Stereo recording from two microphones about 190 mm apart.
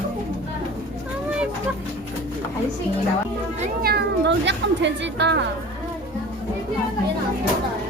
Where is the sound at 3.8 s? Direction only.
60° right (ahead or behind).